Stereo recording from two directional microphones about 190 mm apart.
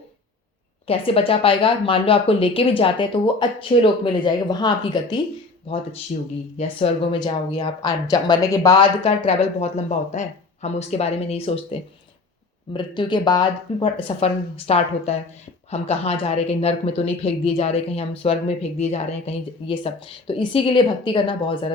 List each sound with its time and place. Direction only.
0.9 s a woman's voice: 30° left (ahead or behind)
6.1 s a woman's voice: 40° left (ahead or behind); by 8.9 s 20° left (ahead or behind)
9.0 s a woman's voice: 35° left (ahead or behind)